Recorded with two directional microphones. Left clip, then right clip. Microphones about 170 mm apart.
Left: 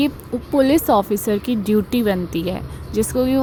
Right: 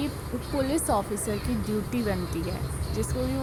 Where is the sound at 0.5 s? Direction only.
35° left (ahead or behind).